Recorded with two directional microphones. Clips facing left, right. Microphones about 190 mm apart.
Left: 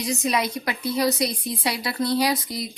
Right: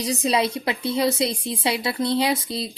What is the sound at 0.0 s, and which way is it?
A woman's voice, 35° right (ahead or behind).